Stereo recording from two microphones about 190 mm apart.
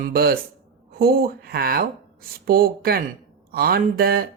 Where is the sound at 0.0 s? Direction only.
55° right (ahead or behind).